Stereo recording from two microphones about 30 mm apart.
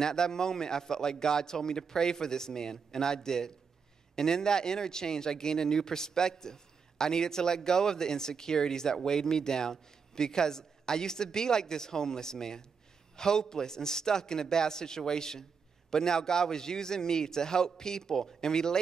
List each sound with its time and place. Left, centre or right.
0.0 s speech: left